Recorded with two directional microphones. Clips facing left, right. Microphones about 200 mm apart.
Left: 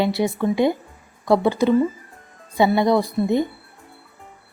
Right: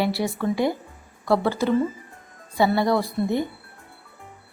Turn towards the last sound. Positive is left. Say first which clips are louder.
# left 4 dB
turn(degrees=20)  # may be behind; listen again after turning